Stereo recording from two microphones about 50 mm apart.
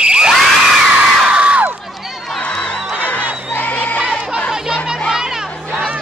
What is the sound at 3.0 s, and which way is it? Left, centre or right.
Crowd, left.